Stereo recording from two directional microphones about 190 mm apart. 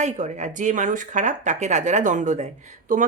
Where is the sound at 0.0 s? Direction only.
40° right (ahead or behind).